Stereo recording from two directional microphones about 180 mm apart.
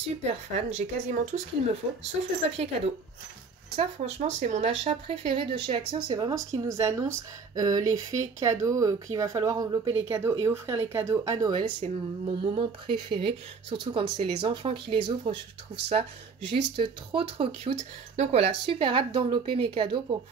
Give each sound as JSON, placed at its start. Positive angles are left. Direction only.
{"t": 0.2, "sound": "speech", "side_deg": -35}
{"t": 11.8, "sound": "speech", "side_deg": -40}
{"t": 12.3, "sound": "speech", "side_deg": -25}
{"t": 16.7, "sound": "speech", "side_deg": -30}